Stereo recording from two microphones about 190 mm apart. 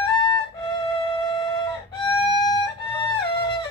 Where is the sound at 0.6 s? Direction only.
25° left (ahead or behind).